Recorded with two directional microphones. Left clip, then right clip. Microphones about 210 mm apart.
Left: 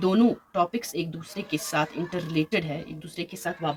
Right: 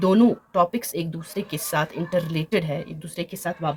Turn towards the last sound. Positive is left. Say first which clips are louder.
# right 3 dB
turn(degrees=-55)  # may be behind; listen again after turning